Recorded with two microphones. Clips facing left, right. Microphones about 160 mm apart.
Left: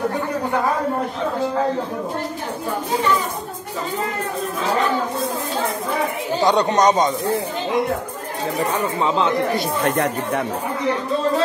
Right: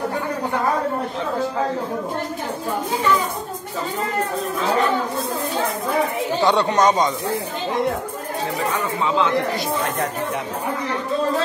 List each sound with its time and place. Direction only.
6.4 s speech: 15° left (ahead or behind)
9.8 s speech: 70° left (ahead or behind)